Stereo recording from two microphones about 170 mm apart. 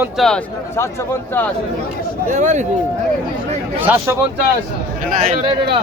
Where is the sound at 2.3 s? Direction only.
45° right (ahead or behind).